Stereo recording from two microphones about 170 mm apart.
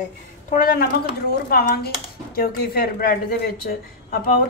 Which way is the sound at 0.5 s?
55° left (ahead or behind).